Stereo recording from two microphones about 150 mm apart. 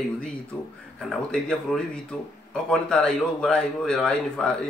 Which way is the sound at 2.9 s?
5° left (ahead or behind).